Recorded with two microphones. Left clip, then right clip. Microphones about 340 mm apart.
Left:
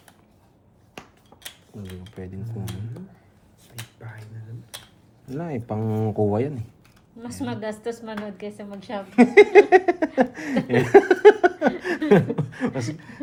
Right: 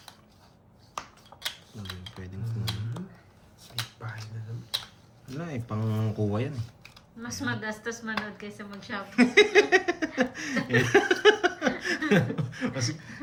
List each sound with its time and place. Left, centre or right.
5.3 s speech: centre
8.7 s speech: centre